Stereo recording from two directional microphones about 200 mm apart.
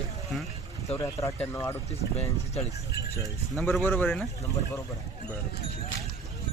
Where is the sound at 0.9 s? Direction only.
15° left (ahead or behind).